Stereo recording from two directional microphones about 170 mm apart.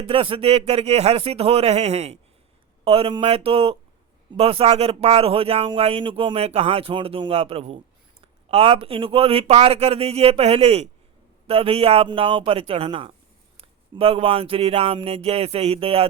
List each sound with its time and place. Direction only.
0.1 s speech: 35° right (ahead or behind)